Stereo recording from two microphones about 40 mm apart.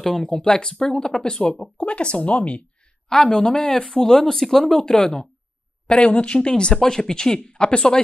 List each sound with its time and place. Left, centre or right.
0.0 s speech: centre; by 2.6 s left
3.1 s speech: centre
5.9 s speech: left